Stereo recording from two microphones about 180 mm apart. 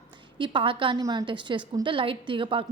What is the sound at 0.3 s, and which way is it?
A woman's voice, 30° right (ahead or behind).